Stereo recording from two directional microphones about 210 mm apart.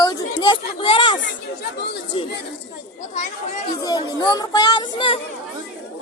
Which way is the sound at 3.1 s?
35° left (ahead or behind).